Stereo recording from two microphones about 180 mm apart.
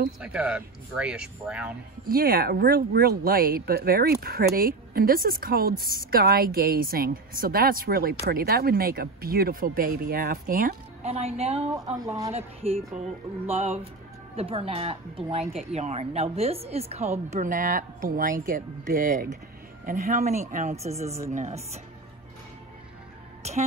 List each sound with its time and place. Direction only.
0.2 s speech: 5° right (ahead or behind)
2.0 s a woman's voice: 55° right (ahead or behind)
11.0 s a woman's voice: 35° right (ahead or behind)
23.4 s a woman's voice: 35° right (ahead or behind)